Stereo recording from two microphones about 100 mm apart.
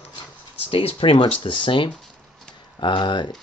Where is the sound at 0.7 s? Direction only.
75° left (ahead or behind); by 3.3 s 50° left (ahead or behind).